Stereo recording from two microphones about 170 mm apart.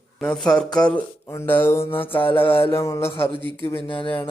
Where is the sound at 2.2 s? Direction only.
30° left (ahead or behind).